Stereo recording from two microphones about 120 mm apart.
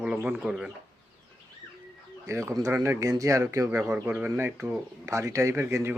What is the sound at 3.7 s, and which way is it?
Speech, 15° right (ahead or behind).